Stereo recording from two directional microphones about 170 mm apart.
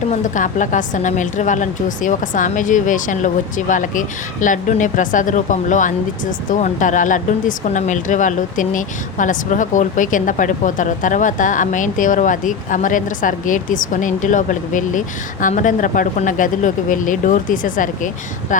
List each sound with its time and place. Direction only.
0.1 s speech: 50° left (ahead or behind)